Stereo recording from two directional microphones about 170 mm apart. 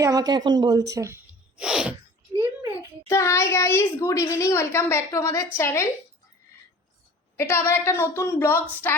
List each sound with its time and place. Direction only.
0.0 s a woman's voice: 20° right (ahead or behind)
1.6 s sneeze: 5° right (ahead or behind)
2.3 s a sound: 20° right (ahead or behind)
3.1 s a child's voice: 15° left (ahead or behind)
7.3 s a child's voice: 15° left (ahead or behind)